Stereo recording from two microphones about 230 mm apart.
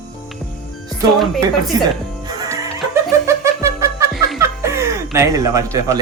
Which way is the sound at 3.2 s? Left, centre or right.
Centre.